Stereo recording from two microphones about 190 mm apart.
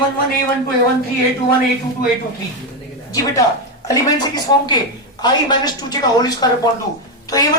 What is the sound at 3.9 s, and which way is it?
A woman's voice, 20° left (ahead or behind).